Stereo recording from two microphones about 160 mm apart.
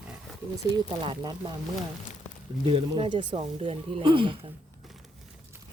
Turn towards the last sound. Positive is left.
turn(degrees=0)  # may be behind; listen again after turning